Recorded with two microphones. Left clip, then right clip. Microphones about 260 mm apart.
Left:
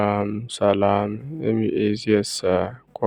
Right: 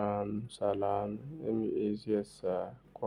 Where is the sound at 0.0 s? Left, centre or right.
Left.